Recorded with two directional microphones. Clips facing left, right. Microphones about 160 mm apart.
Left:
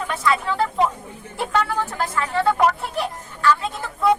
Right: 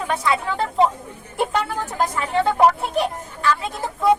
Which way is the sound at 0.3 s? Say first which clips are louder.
Left 4 dB; 25° right (ahead or behind).